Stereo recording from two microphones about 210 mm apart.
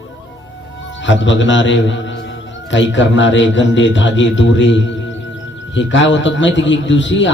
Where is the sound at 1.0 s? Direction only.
60° left (ahead or behind).